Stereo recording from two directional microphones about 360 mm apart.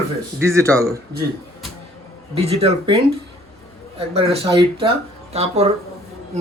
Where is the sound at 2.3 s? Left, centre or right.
Centre.